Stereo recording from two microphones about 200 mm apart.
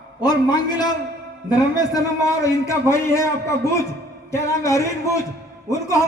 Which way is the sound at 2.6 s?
15° left (ahead or behind).